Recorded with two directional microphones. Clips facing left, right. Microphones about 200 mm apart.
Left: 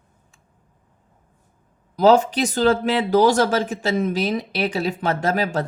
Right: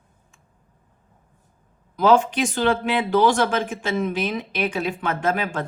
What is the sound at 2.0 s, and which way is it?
Speech, 40° left (ahead or behind).